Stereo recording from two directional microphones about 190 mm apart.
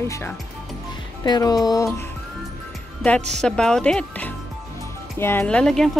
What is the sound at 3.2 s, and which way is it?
Speech, 5° left (ahead or behind).